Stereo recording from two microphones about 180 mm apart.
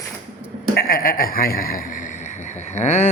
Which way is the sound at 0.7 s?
55° left (ahead or behind).